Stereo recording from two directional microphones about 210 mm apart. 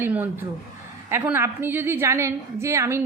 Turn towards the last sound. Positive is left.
turn(degrees=-15)  # may be behind; listen again after turning